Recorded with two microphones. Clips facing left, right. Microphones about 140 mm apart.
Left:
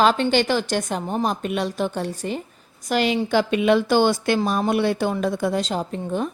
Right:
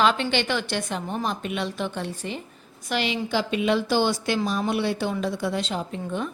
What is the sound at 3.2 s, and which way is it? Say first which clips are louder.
A woman's voice: left 5 dB; 55° left (ahead or behind).